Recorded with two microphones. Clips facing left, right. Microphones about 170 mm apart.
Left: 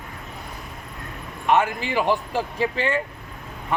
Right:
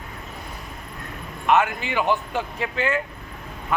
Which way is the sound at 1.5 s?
30° left (ahead or behind).